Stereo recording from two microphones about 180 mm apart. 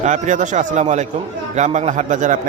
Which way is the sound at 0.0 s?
45° right (ahead or behind).